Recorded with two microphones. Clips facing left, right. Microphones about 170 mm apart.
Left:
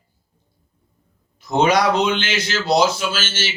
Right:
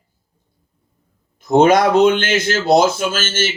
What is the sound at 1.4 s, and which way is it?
Speech, 50° right (ahead or behind).